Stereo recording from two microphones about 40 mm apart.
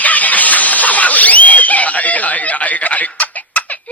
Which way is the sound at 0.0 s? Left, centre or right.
Left.